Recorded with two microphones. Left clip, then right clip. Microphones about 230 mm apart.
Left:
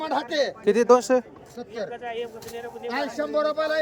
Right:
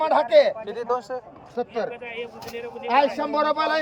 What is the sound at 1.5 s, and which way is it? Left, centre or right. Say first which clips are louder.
Speech: right 6 dB; right.